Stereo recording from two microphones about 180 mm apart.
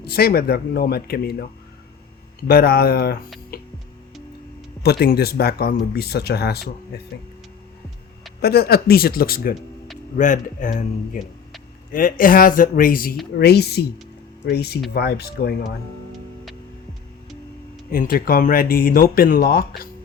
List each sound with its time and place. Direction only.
0.0 s speech: 60° left (ahead or behind)
2.5 s speech: 60° left (ahead or behind)
3.5 s music: 55° left (ahead or behind)
4.8 s speech: 60° left (ahead or behind)
8.4 s speech: 60° left (ahead or behind)
10.2 s speech: 45° left (ahead or behind)
13.4 s speech: 65° left (ahead or behind)
17.9 s speech: 55° left (ahead or behind)